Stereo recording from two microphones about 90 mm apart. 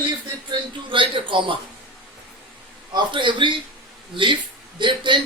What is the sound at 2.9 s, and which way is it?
A man's voice, 60° right (ahead or behind).